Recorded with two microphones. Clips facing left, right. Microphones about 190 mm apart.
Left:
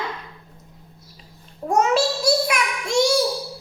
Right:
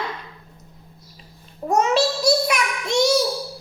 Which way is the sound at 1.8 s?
5° left (ahead or behind).